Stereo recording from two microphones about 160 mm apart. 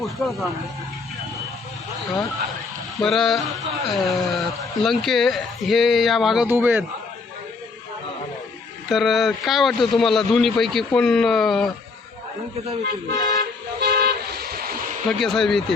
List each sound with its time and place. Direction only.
0.0 s speech: centre (ahead or behind)
3.0 s speech: centre (ahead or behind)
8.9 s speech: centre (ahead or behind)
12.8 s speech: 90° right
13.2 s vehicle: 65° right (ahead or behind)
15.0 s speech: centre (ahead or behind)